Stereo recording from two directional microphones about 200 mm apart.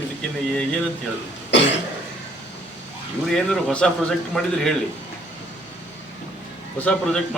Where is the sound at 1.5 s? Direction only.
60° left (ahead or behind).